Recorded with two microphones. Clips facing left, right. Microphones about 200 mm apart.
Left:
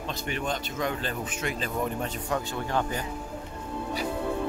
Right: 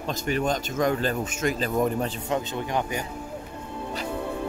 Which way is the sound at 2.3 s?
20° right (ahead or behind).